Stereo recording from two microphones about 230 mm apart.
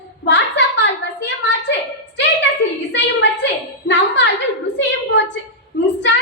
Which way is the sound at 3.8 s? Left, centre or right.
Left.